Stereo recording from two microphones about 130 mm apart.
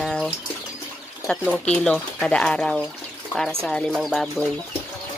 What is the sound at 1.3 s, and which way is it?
Speech, 5° left (ahead or behind).